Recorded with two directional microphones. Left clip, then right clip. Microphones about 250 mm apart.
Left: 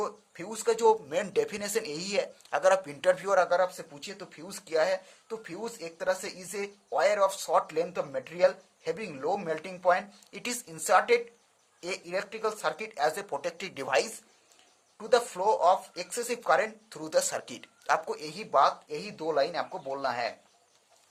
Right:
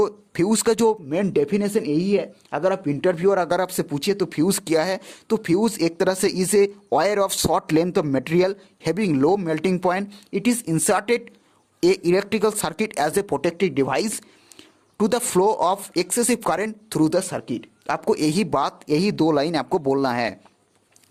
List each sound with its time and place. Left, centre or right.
0.0 s speech: right
1.1 s speech: right
10.3 s speech: right